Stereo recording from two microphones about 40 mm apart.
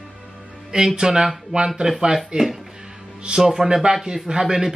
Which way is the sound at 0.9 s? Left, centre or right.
Centre.